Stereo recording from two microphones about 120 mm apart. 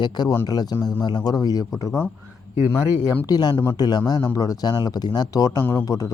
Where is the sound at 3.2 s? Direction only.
35° left (ahead or behind).